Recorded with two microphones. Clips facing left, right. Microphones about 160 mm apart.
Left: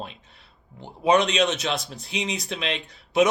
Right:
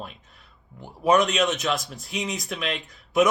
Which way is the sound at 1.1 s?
30° left (ahead or behind).